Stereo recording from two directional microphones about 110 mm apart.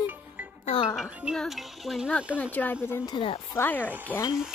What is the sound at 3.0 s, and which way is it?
Speech, 50° left (ahead or behind).